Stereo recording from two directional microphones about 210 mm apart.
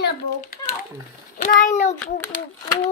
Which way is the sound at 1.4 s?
40° left (ahead or behind).